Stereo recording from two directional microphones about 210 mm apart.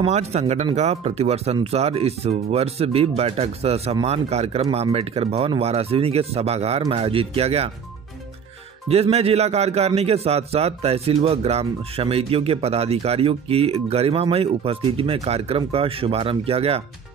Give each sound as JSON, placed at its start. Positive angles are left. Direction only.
{"t": 0.0, "sound": "a man's voice", "side_deg": -30}
{"t": 8.8, "sound": "a man's voice", "side_deg": -30}